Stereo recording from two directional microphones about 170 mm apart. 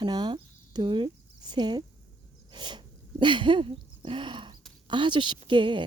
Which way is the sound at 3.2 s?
30° right (ahead or behind).